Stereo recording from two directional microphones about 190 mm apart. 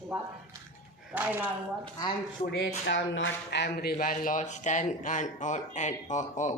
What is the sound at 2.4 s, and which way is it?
Speech, 55° left (ahead or behind).